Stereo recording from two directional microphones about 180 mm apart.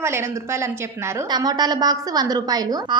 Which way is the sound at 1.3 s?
20° right (ahead or behind).